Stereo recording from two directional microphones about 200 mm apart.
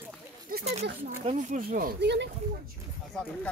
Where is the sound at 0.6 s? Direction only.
30° right (ahead or behind); by 2.3 s 60° right (ahead or behind).